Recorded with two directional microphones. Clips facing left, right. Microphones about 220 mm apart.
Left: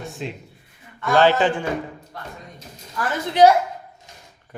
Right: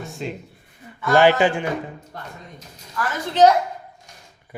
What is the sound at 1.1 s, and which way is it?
Speech, 15° right (ahead or behind).